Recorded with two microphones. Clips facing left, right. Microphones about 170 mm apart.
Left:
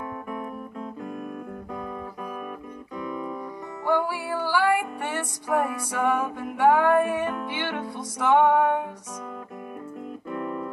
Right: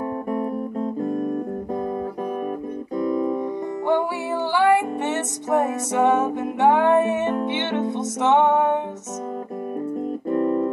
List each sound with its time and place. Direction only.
0.3 s guitar: 40° right (ahead or behind)
3.0 s music: 40° right (ahead or behind)
3.8 s music: 25° right (ahead or behind)
10.3 s music: 35° right (ahead or behind)